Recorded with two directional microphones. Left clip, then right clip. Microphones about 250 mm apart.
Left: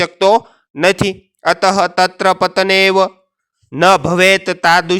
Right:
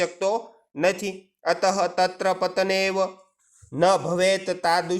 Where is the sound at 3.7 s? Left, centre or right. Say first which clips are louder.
Left 10 dB; left.